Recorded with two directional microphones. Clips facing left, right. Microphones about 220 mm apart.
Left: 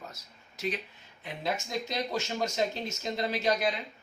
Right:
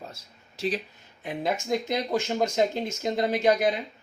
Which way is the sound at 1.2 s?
50° right (ahead or behind).